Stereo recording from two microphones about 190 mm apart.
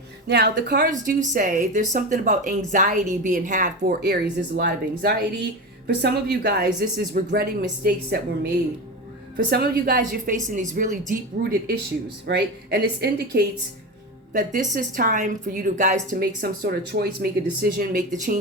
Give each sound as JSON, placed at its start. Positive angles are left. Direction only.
{"t": 0.3, "sound": "speech", "side_deg": -60}
{"t": 0.9, "sound": "a woman's voice", "side_deg": -45}
{"t": 9.5, "sound": "a woman's voice", "side_deg": -55}
{"t": 14.3, "sound": "a woman's voice", "side_deg": -40}